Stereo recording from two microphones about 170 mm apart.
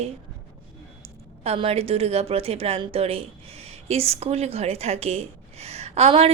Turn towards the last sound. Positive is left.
turn(degrees=-35)  # may be behind; listen again after turning